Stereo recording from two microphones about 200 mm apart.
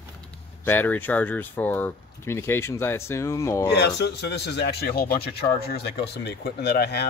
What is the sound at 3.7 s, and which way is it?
A man's voice, 55° left (ahead or behind).